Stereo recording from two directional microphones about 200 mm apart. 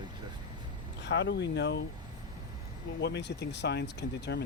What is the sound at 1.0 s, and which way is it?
Speech, 60° left (ahead or behind).